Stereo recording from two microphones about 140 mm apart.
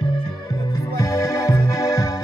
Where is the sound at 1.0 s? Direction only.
25° left (ahead or behind).